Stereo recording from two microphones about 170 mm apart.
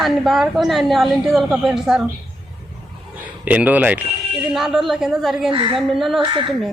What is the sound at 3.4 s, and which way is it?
A man's voice, 10° right (ahead or behind).